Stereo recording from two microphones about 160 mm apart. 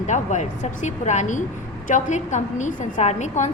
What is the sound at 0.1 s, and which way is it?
A woman's voice, 50° left (ahead or behind).